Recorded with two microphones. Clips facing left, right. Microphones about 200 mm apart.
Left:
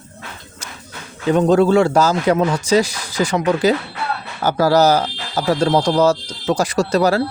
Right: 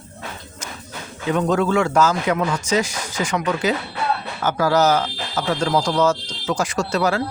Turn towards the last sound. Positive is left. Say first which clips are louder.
# left 5 dB
turn(degrees=35)  # may be behind; listen again after turning